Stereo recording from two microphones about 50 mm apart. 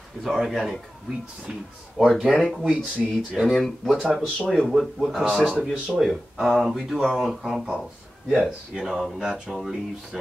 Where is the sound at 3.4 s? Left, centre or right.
Centre.